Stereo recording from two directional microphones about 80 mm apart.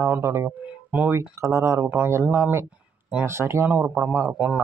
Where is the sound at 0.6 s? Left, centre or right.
Centre.